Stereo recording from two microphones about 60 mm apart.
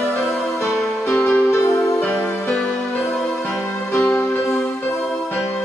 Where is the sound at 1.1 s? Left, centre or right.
Left.